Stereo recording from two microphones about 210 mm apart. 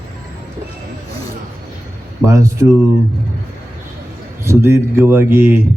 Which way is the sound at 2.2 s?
15° right (ahead or behind).